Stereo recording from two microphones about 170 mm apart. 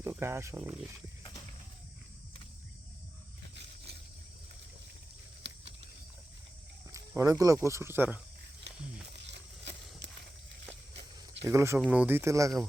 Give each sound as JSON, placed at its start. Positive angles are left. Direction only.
{"t": 0.0, "sound": "speech", "side_deg": -15}
{"t": 7.2, "sound": "speech", "side_deg": -20}
{"t": 9.1, "sound": "a sound", "side_deg": -90}
{"t": 11.4, "sound": "speech", "side_deg": -15}